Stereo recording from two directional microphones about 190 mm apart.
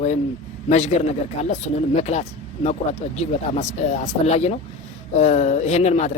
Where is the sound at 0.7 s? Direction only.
35° left (ahead or behind).